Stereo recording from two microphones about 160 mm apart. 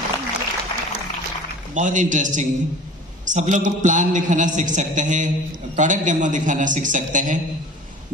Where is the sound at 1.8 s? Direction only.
50° right (ahead or behind).